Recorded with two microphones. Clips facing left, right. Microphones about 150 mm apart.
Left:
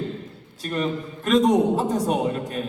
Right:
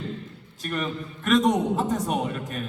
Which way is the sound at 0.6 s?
30° left (ahead or behind).